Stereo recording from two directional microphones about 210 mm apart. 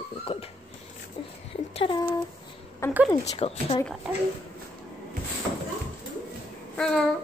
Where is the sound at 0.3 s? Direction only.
25° left (ahead or behind).